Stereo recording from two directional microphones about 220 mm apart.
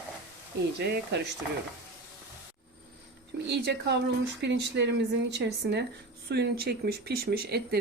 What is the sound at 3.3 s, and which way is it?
Speech, 50° right (ahead or behind).